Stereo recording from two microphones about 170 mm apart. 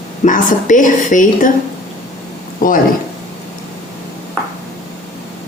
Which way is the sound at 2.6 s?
55° left (ahead or behind).